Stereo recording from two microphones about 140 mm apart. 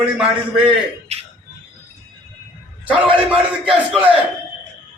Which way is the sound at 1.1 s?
50° right (ahead or behind).